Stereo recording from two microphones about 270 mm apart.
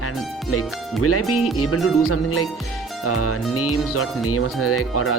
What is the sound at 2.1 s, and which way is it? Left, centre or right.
Speech, left.